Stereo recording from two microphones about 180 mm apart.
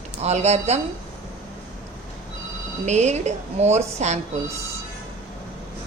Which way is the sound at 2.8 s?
40° right (ahead or behind).